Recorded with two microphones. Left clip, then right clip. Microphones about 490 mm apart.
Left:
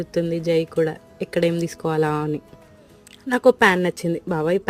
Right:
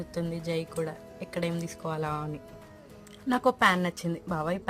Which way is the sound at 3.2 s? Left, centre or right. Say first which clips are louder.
Left 8 dB; centre.